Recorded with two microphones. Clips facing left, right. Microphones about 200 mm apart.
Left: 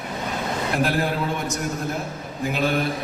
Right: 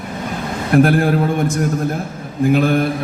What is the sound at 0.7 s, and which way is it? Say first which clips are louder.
Mantra: right 11 dB; 50° right (ahead or behind).